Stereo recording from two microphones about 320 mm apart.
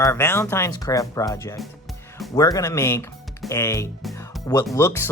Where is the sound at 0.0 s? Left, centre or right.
Centre.